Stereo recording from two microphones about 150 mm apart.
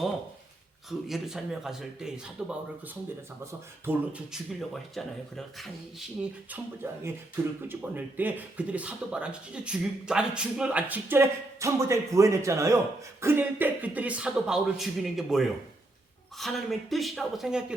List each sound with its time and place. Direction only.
0.9 s a man's voice: centre (ahead or behind)
4.3 s a man's voice: centre (ahead or behind)
6.8 s a man's voice: 15° right (ahead or behind)